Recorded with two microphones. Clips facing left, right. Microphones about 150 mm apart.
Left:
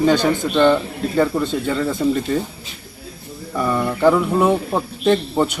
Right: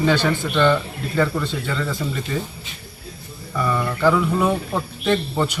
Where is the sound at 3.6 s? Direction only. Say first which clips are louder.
Left 3 dB; 20° left (ahead or behind).